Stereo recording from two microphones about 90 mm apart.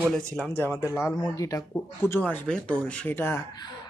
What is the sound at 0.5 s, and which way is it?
Speech, 30° left (ahead or behind).